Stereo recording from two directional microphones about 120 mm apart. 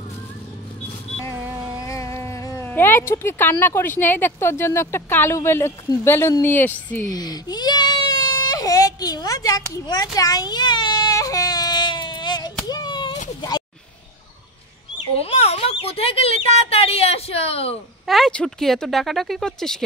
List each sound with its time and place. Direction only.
1.8 s a woman's voice: 25° left (ahead or behind)
7.1 s baby cry: 35° left (ahead or behind)
12.6 s a sound: 35° left (ahead or behind)
15.1 s speech: 60° left (ahead or behind)
18.0 s speech: centre (ahead or behind)